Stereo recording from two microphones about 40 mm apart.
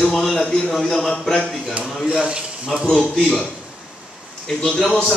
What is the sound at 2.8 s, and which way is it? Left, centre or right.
Speech, centre.